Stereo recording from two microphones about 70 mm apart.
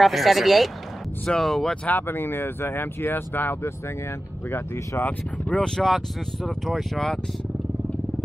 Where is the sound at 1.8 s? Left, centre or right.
Left.